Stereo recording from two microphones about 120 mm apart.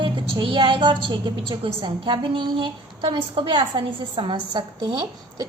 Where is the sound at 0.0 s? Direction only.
45° right (ahead or behind).